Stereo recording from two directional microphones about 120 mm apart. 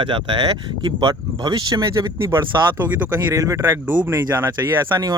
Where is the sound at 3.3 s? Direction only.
25° right (ahead or behind).